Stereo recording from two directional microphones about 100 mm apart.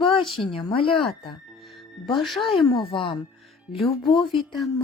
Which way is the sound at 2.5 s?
55° left (ahead or behind).